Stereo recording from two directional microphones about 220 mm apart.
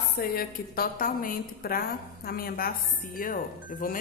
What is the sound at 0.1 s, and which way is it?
A woman's voice, 45° left (ahead or behind).